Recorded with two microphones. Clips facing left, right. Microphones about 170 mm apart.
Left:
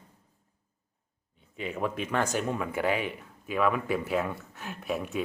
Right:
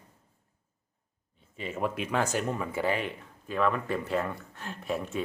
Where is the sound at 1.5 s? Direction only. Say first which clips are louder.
Even; centre (ahead or behind).